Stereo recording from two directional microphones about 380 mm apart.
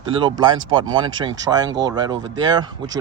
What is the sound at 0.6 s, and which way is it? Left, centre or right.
Speech, right.